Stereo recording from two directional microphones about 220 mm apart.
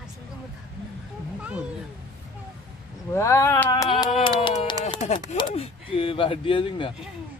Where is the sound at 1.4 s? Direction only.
5° right (ahead or behind).